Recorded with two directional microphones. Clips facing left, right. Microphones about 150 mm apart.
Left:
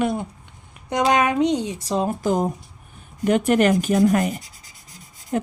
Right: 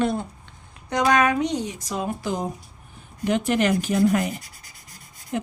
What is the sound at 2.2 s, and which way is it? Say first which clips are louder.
Speech: left 6 dB; 45° left (ahead or behind).